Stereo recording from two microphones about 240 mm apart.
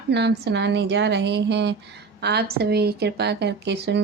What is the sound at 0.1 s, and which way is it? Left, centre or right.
A woman's voice, right.